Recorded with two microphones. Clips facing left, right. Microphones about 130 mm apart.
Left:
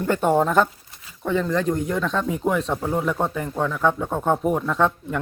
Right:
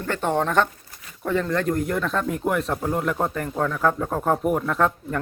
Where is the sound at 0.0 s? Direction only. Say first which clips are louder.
Left 4 dB; 10° left (ahead or behind).